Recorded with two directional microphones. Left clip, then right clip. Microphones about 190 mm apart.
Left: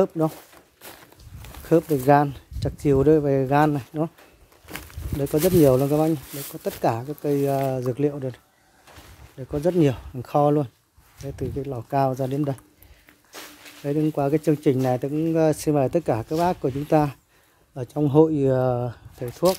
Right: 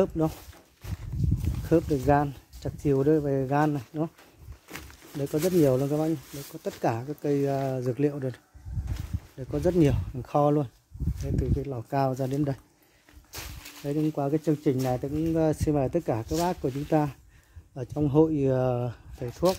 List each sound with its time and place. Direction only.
0.0 s speech: 5° left (ahead or behind)
0.8 s horse: 45° left (ahead or behind)
1.7 s speech: 10° left (ahead or behind)
4.7 s a sound: 25° left (ahead or behind)
5.6 s speech: 15° left (ahead or behind); by 8.4 s 5° right (ahead or behind)
9.4 s speech: centre (ahead or behind)
13.3 s speech: 50° right (ahead or behind)
13.8 s speech: 15° left (ahead or behind)